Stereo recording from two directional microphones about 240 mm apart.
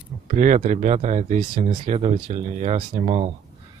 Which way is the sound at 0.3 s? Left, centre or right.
Right.